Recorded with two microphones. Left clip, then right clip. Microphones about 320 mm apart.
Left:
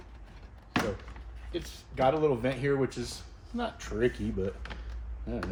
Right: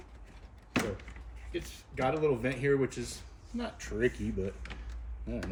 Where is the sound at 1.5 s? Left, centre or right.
Centre.